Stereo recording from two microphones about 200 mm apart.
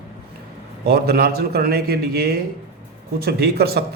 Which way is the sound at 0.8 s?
50° right (ahead or behind).